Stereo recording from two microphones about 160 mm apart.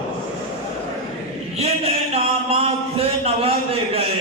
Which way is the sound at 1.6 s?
40° right (ahead or behind).